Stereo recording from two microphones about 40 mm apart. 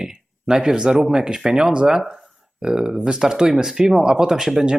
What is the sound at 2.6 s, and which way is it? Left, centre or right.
Speech, centre.